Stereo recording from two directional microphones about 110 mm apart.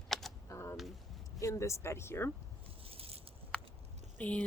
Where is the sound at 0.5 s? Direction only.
25° left (ahead or behind).